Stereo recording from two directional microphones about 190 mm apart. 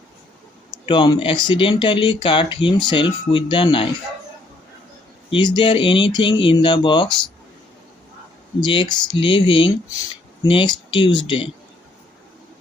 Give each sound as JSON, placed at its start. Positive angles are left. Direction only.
{"t": 0.9, "sound": "speech", "side_deg": 25}
{"t": 5.3, "sound": "speech", "side_deg": 25}
{"t": 8.6, "sound": "speech", "side_deg": 25}